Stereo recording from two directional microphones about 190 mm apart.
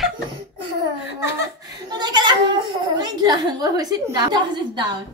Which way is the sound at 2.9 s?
20° right (ahead or behind).